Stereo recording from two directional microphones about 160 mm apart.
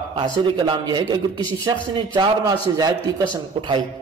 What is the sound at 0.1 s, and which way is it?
A man's voice, 30° right (ahead or behind).